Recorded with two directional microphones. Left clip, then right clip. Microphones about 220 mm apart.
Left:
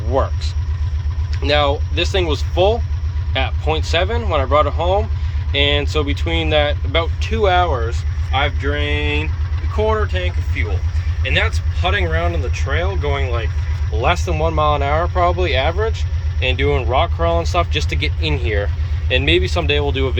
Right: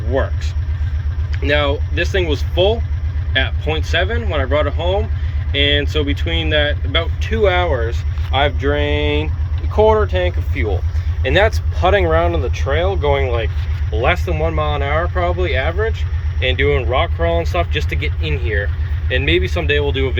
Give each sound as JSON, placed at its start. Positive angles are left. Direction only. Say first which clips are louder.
{"t": 1.4, "sound": "speech", "louder": "left 1 dB", "side_deg": 5}
{"t": 5.8, "sound": "speech", "louder": "even", "side_deg": 45}
{"t": 6.1, "sound": "speech", "louder": "even", "side_deg": 10}
{"t": 13.9, "sound": "speech", "louder": "right 1 dB", "side_deg": 5}